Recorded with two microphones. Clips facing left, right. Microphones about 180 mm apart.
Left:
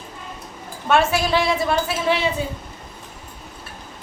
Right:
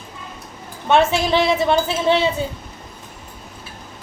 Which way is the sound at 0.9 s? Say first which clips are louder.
Right 2 dB; 20° right (ahead or behind).